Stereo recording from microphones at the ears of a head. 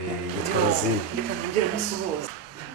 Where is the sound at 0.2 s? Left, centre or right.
Right.